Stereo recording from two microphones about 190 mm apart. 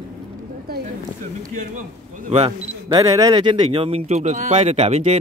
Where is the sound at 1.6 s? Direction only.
45° right (ahead or behind).